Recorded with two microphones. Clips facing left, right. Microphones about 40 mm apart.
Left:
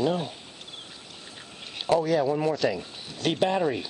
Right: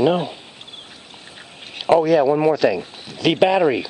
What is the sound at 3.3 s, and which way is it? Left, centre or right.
Speech, right.